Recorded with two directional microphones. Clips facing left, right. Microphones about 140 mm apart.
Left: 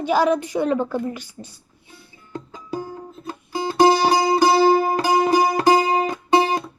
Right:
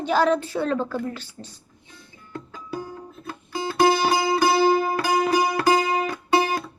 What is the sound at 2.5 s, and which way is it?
Music, 20° left (ahead or behind).